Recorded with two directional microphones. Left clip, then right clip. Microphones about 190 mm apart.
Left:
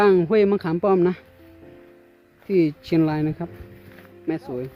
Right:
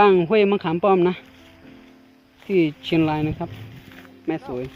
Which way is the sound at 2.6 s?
90° left.